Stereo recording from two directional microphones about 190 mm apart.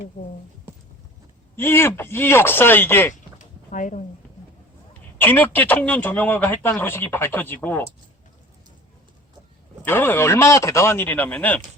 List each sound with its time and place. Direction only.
1.5 s a man's voice: 10° left (ahead or behind)
3.3 s a sound: 40° left (ahead or behind)
5.1 s a man's voice: 10° left (ahead or behind)
9.8 s a man's voice: 10° left (ahead or behind)